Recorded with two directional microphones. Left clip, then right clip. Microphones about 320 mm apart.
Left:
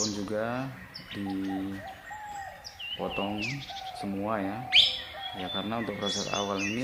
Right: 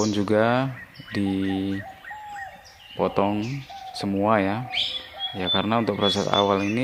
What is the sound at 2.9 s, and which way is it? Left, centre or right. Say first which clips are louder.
Speech: right 10 dB; right.